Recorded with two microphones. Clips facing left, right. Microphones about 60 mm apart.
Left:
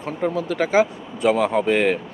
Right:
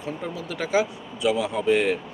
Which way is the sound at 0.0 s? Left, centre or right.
Left.